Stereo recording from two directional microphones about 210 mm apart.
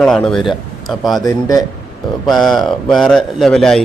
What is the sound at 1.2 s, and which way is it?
Speech, 15° left (ahead or behind).